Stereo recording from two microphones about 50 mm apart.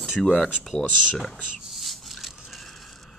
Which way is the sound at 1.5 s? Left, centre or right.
Centre.